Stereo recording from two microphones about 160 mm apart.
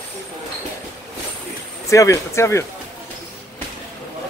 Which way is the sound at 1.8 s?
20° left (ahead or behind).